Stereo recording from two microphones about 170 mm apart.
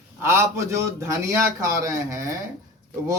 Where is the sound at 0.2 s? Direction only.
15° right (ahead or behind).